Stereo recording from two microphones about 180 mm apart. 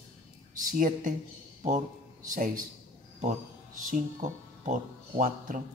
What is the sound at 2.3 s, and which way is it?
Speech, 50° right (ahead or behind).